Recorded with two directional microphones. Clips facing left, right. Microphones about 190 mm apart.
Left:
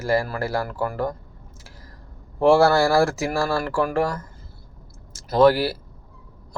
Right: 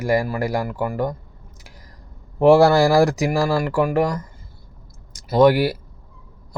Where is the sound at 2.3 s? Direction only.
20° right (ahead or behind).